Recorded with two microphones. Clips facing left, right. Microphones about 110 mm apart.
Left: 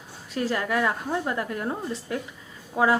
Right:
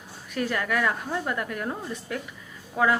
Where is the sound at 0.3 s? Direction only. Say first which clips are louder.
Left 1 dB; 25° left (ahead or behind).